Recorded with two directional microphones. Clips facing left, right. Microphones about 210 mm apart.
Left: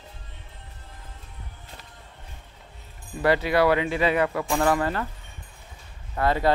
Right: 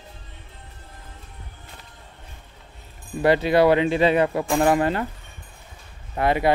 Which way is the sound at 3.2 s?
25° right (ahead or behind).